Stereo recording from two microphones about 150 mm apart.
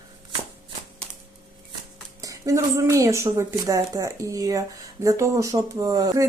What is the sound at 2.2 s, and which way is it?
A woman's voice, 20° right (ahead or behind).